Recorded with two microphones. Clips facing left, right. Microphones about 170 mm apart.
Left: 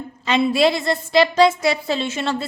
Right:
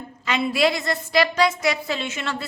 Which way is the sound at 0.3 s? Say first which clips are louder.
Left 4 dB; 25° left (ahead or behind).